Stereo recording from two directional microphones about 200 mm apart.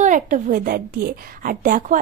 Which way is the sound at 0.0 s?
40° right (ahead or behind).